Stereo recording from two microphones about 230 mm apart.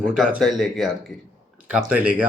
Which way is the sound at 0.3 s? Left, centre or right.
Centre.